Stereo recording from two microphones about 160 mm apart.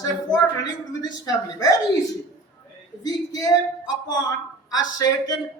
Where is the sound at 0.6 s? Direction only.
25° left (ahead or behind).